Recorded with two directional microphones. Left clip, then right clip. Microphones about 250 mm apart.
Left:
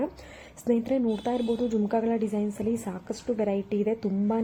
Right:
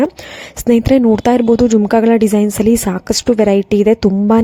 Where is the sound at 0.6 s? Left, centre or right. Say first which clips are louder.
Right 15 dB; right.